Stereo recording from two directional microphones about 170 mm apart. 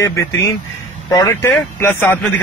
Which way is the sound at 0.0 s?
15° left (ahead or behind).